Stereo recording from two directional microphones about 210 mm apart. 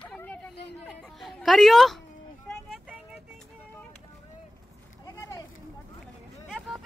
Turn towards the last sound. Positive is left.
turn(degrees=0)  # may be behind; listen again after turning